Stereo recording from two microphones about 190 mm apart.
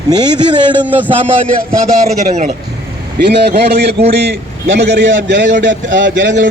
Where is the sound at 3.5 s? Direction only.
60° right (ahead or behind).